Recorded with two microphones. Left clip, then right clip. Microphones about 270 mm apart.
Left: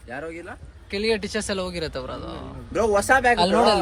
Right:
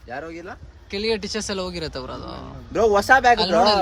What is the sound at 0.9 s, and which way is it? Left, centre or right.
Speech, centre.